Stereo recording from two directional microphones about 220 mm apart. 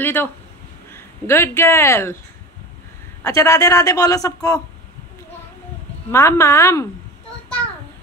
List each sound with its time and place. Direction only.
0.0 s speech: 10° left (ahead or behind)
3.3 s a man's voice: 15° left (ahead or behind)
6.1 s a man's voice: 15° left (ahead or behind)